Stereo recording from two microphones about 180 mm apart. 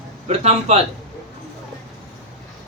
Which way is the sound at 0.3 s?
35° right (ahead or behind).